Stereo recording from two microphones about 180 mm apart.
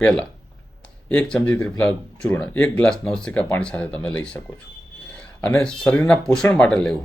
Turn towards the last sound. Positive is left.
turn(degrees=5)  # may be behind; listen again after turning